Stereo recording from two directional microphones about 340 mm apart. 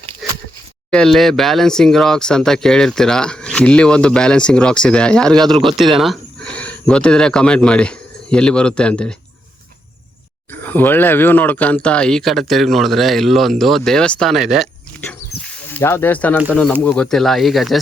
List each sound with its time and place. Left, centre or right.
0.9 s speech: centre
10.5 s speech: centre